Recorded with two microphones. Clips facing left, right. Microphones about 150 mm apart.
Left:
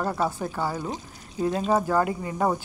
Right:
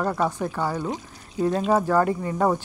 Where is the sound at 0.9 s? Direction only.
35° right (ahead or behind).